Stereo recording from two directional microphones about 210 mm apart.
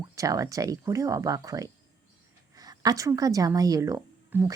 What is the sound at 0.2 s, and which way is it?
A woman's voice, 15° right (ahead or behind).